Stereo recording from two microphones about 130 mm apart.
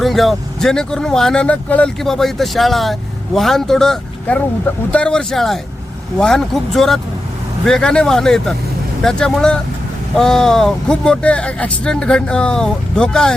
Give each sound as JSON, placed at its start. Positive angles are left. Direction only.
{"t": 0.0, "sound": "speech", "side_deg": 0}